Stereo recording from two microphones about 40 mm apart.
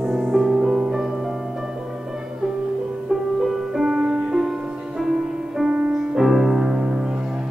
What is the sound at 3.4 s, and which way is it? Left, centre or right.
Music, centre.